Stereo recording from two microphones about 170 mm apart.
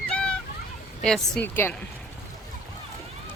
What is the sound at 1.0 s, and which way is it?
Speech, 5° left (ahead or behind).